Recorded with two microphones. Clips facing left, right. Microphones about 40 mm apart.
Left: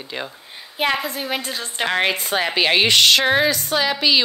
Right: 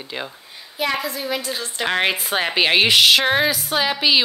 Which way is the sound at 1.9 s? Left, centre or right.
Centre.